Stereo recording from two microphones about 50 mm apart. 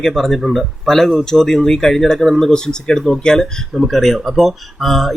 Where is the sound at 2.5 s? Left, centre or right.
Centre.